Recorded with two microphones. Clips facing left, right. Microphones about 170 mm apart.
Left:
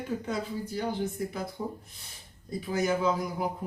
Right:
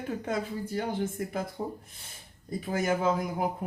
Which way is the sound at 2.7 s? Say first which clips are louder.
Even; 50° right (ahead or behind).